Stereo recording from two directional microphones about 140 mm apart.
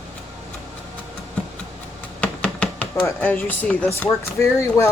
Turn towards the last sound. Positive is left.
turn(degrees=20)  # may be behind; listen again after turning